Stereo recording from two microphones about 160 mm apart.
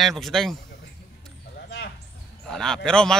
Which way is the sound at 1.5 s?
90° left.